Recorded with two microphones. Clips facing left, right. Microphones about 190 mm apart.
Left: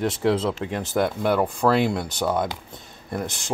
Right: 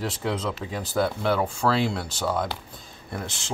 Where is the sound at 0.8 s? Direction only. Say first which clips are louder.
Left 2 dB; 20° left (ahead or behind).